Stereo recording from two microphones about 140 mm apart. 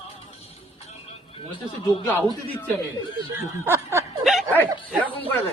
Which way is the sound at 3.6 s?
20° right (ahead or behind).